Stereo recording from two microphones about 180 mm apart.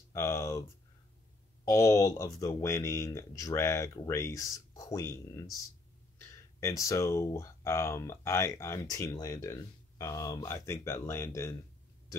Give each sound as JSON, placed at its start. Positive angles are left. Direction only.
{"t": 0.1, "sound": "speech", "side_deg": 15}